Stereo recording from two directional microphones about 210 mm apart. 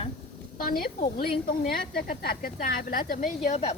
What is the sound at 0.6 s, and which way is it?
A woman's voice, 40° left (ahead or behind).